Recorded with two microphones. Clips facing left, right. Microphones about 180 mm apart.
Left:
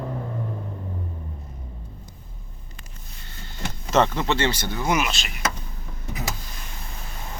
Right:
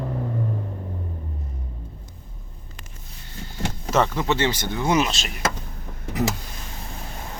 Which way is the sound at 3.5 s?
10° right (ahead or behind).